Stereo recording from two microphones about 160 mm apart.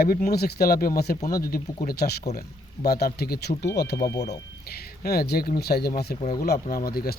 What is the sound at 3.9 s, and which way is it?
Speech, 20° left (ahead or behind).